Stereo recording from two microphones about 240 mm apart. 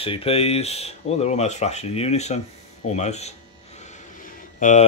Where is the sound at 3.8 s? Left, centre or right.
Left.